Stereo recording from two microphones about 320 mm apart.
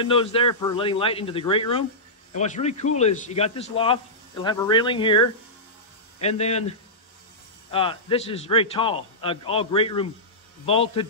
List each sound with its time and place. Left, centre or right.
0.0 s a man's voice: centre
6.2 s a man's voice: centre
7.7 s a man's voice: centre